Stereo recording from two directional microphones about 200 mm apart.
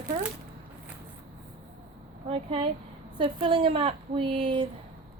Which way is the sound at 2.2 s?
25° right (ahead or behind).